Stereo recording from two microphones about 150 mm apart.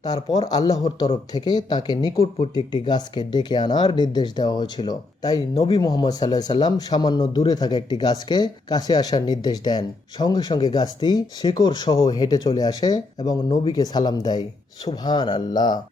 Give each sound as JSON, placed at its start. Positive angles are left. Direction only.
{"t": 0.0, "sound": "a man's voice", "side_deg": 25}
{"t": 0.9, "sound": "a man's voice", "side_deg": 35}
{"t": 5.5, "sound": "speech", "side_deg": 35}
{"t": 5.8, "sound": "a man's voice", "side_deg": 25}